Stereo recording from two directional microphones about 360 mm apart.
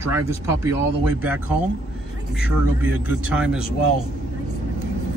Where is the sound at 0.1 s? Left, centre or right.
Centre.